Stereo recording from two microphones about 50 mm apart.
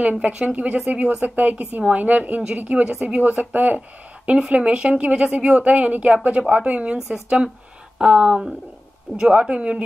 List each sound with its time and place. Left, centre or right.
0.0 s speech: right
8.0 s speech: centre